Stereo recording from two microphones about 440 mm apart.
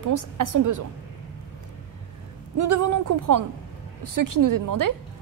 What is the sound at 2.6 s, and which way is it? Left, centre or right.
A woman's voice, right.